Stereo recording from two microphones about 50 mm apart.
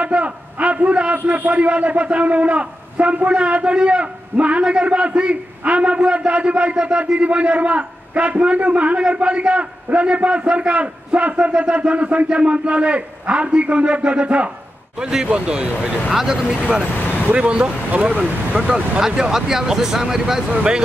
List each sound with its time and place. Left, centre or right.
0.0 s a sound: right
1.2 s a man's voice: right
16.1 s speech: centre
16.9 s vehicle: left
17.3 s a man's voice: right